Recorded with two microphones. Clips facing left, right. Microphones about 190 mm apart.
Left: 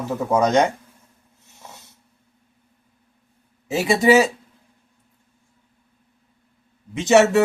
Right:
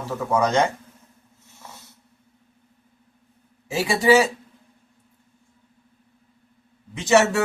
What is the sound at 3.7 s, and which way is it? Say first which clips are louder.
Speech: left 2 dB; 20° left (ahead or behind).